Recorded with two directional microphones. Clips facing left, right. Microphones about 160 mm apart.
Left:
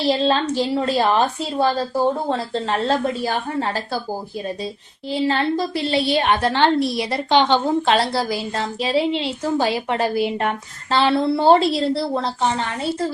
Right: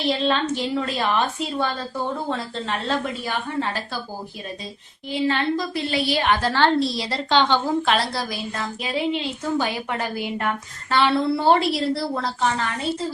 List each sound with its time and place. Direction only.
0.0 s a woman's voice: 35° left (ahead or behind)
5.1 s a woman's voice: 35° left (ahead or behind)